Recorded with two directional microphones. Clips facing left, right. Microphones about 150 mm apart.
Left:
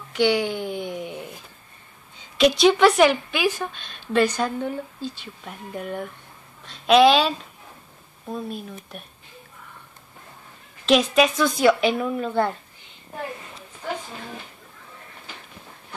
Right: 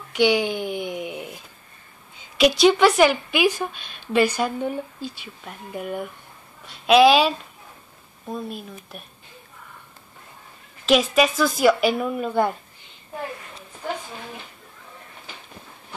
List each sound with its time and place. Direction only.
0.1 s a sound: 15° right (ahead or behind)
2.3 s a woman's voice: 5° right (ahead or behind)
10.9 s a woman's voice: 5° right (ahead or behind)